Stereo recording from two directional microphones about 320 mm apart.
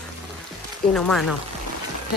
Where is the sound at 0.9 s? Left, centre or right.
Centre.